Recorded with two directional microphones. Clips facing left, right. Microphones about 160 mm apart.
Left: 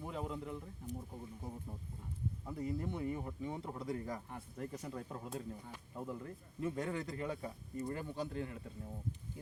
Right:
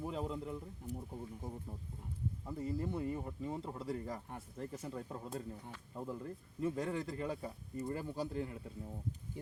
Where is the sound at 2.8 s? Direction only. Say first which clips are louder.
Right 1 dB; 5° right (ahead or behind).